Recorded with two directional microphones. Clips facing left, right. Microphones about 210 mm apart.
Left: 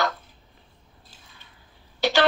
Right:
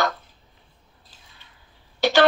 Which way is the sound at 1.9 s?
50° right (ahead or behind).